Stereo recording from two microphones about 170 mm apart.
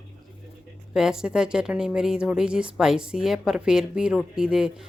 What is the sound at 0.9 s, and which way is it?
A woman's voice, 5° right (ahead or behind).